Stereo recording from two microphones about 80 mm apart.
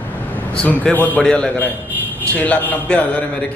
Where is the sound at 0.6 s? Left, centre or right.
Centre.